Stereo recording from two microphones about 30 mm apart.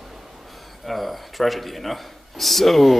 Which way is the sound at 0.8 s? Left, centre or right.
Centre.